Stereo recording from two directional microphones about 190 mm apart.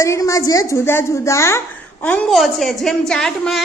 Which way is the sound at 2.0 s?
5° left (ahead or behind).